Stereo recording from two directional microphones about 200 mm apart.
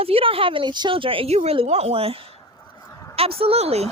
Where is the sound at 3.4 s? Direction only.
30° right (ahead or behind).